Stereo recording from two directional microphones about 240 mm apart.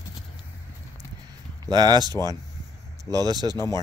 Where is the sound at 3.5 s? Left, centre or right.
Centre.